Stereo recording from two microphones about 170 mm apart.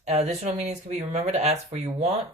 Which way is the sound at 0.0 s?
40° right (ahead or behind).